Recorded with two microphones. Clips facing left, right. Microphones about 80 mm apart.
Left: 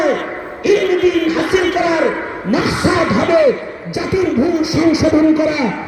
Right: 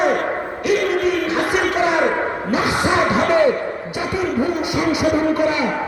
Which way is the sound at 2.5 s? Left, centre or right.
Right.